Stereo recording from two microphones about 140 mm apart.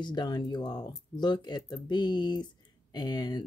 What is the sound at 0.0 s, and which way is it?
Speech, 30° left (ahead or behind).